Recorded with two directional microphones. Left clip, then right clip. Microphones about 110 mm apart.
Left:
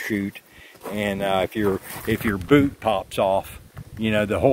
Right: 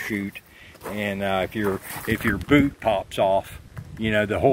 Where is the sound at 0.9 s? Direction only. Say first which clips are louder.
Left 2 dB; 85° left; by 2.3 s 65° left (ahead or behind).